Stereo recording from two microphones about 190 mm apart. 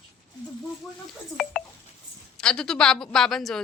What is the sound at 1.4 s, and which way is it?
A woman's voice, 5° left (ahead or behind).